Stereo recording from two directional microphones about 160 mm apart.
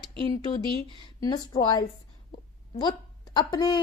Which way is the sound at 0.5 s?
30° left (ahead or behind).